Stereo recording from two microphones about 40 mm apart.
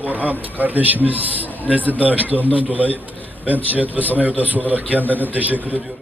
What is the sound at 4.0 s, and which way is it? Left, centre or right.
A man's voice, right.